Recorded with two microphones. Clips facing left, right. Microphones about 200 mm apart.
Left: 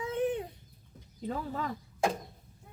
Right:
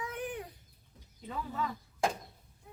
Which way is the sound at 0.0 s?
25° left (ahead or behind).